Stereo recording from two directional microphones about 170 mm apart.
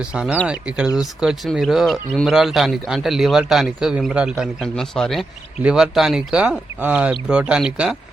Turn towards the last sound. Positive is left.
turn(degrees=-5)  # may be behind; listen again after turning